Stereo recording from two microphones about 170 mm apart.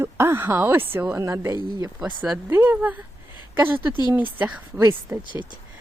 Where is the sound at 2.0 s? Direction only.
5° right (ahead or behind).